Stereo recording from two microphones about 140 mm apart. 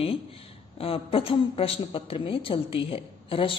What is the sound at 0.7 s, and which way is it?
A woman's voice, 40° left (ahead or behind).